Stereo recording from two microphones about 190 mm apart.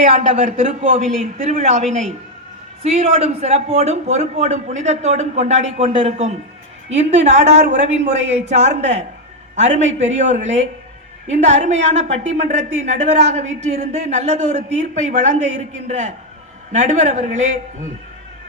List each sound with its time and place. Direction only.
0.2 s a woman's voice: 35° right (ahead or behind)
16.7 s a woman's voice: 40° right (ahead or behind)